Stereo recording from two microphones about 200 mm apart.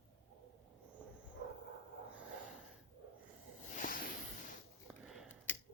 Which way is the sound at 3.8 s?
45° left (ahead or behind).